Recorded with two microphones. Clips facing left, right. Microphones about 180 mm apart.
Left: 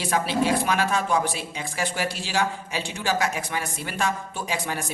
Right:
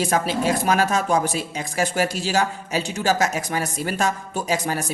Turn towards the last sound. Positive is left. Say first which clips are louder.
# right 5 dB
turn(degrees=-40)  # may be behind; listen again after turning